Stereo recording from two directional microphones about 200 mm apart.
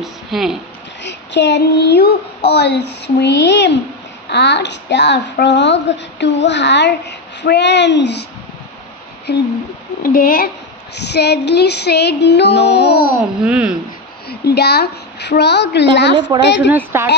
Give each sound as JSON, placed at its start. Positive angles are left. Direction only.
{"t": 0.0, "sound": "a sound", "side_deg": 0}
{"t": 1.0, "sound": "speech", "side_deg": 60}
{"t": 9.3, "sound": "speech", "side_deg": 55}
{"t": 10.0, "sound": "a woman's voice", "side_deg": 45}
{"t": 11.0, "sound": "speech", "side_deg": 55}
{"t": 13.4, "sound": "speech", "side_deg": -5}
{"t": 14.3, "sound": "speech", "side_deg": 55}
{"t": 16.7, "sound": "speech", "side_deg": -10}